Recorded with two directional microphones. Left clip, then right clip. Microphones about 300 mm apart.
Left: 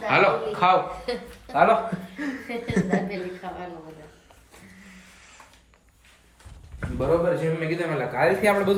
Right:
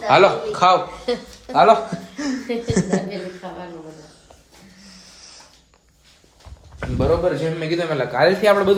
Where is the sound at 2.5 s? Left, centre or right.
Right.